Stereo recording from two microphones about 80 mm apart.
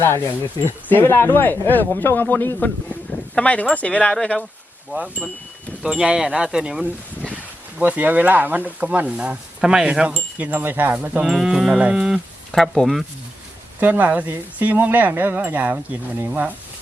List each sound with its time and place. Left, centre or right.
0.0 s a man's voice: left; by 4.4 s centre
4.9 s speech: centre
11.3 s moo: centre
12.7 s speech: centre
13.7 s speech: right